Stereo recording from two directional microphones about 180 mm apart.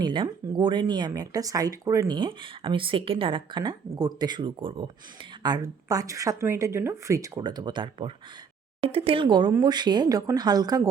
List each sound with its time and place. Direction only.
0.0 s speech: 25° right (ahead or behind)